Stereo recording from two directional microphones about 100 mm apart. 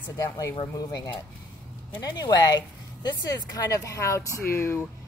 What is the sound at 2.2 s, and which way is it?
Speech, 45° left (ahead or behind).